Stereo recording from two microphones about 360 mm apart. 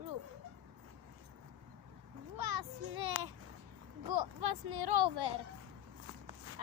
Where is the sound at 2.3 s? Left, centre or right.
Right.